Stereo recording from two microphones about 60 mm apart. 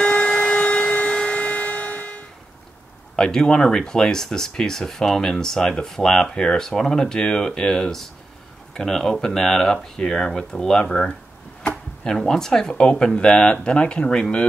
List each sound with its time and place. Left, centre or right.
0.0 s siren: centre
3.2 s speech: centre